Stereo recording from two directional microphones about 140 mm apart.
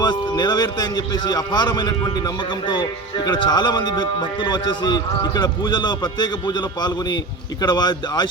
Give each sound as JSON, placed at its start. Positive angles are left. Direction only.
{"t": 0.0, "sound": "a man's voice", "side_deg": 30}